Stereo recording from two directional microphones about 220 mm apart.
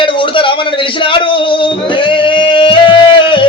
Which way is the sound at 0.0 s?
20° left (ahead or behind).